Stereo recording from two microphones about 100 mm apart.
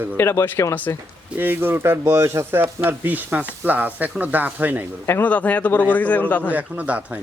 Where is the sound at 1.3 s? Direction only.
20° right (ahead or behind).